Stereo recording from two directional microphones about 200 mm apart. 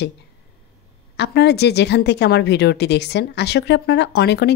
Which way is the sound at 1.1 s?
60° left (ahead or behind).